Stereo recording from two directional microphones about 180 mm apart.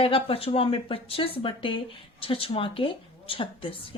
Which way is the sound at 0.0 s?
30° left (ahead or behind).